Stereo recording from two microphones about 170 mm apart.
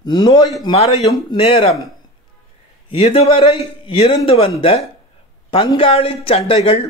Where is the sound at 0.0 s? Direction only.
25° left (ahead or behind).